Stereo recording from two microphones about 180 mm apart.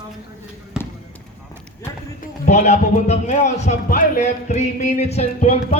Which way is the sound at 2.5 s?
40° left (ahead or behind).